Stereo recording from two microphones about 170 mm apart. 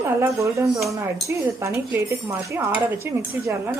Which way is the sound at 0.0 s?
15° right (ahead or behind).